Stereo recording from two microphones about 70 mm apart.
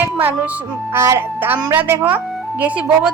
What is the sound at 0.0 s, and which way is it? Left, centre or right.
Music, right.